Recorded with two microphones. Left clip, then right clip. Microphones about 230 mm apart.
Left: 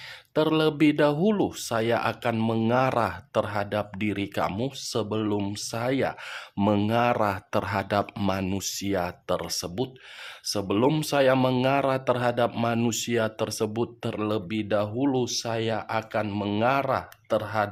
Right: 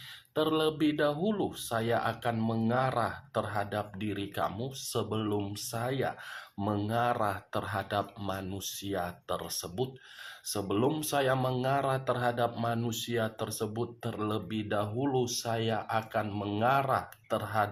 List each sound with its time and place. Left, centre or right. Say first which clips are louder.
0.3 s speech: left 6 dB; left